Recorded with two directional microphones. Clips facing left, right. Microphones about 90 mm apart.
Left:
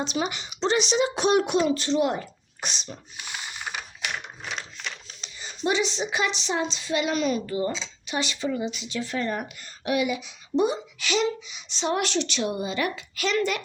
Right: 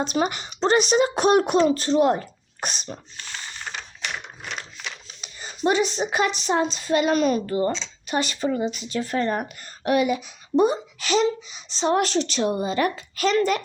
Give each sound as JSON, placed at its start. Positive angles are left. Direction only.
{"t": 0.0, "sound": "a woman's voice", "side_deg": -45}
{"t": 3.2, "sound": "a sound", "side_deg": 10}
{"t": 5.4, "sound": "a woman's voice", "side_deg": -45}